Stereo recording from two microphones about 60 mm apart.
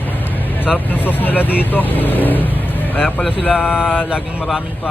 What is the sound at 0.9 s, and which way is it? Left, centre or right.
Speech, left.